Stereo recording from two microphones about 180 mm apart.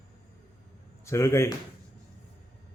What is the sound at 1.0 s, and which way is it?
Speech, 15° left (ahead or behind).